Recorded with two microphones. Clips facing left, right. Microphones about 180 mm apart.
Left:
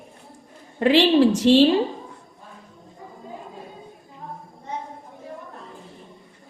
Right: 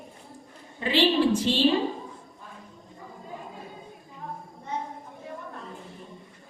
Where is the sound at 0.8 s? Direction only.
90° left.